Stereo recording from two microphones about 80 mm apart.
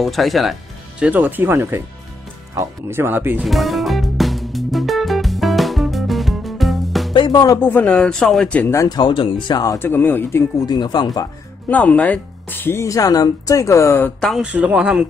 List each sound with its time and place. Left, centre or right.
0.0 s speech: centre
0.9 s speech: centre
3.4 s music: centre
7.2 s music: left
7.6 s speech: centre
8.8 s speech: left
9.8 s speech: left
10.6 s speech: left
11.7 s speech: centre
12.8 s speech: left
14.4 s a man's voice: centre